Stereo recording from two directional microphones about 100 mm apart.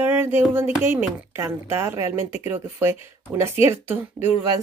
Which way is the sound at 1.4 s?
25° right (ahead or behind).